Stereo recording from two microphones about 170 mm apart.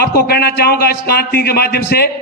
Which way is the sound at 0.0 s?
75° left (ahead or behind).